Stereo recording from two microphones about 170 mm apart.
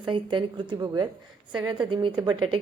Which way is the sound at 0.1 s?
30° right (ahead or behind).